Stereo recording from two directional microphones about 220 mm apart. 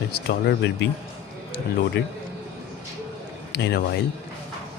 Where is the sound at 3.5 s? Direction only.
50° left (ahead or behind).